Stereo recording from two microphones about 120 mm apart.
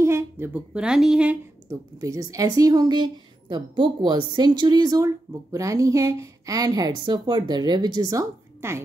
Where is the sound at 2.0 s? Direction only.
30° right (ahead or behind).